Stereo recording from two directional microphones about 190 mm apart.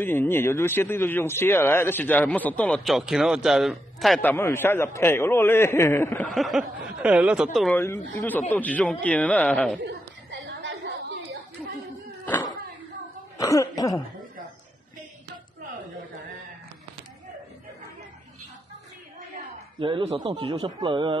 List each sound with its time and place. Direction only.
0.0 s speech: 10° left (ahead or behind)
6.3 s speech: centre (ahead or behind)
7.7 s speech: 10° left (ahead or behind)
9.8 s a sound: 65° right (ahead or behind)
13.4 s speech: 15° left (ahead or behind)
19.8 s speech: 30° right (ahead or behind)